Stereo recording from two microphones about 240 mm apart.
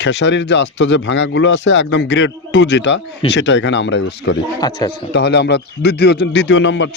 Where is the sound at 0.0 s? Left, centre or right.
Left.